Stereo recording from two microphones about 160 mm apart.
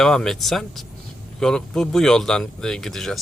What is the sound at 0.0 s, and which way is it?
Speech, centre (ahead or behind).